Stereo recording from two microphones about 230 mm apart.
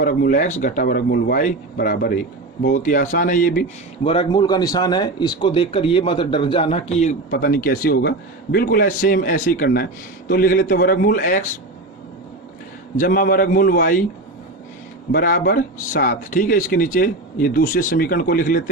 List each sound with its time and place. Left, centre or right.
0.0 s speech: left
4.0 s speech: left
13.0 s speech: left
15.1 s speech: left